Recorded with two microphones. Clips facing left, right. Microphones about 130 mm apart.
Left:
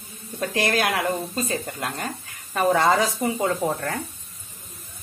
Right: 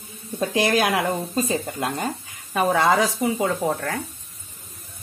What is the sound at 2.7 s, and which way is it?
Speech, centre (ahead or behind).